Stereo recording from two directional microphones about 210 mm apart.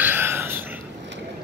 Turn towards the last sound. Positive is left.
turn(degrees=-10)  # may be behind; listen again after turning